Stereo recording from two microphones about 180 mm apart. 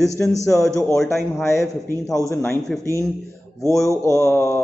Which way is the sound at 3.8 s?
15° left (ahead or behind).